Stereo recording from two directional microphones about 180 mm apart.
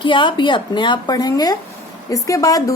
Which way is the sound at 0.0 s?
25° left (ahead or behind).